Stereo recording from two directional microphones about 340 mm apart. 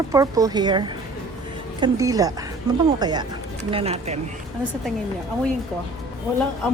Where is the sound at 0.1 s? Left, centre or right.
Centre.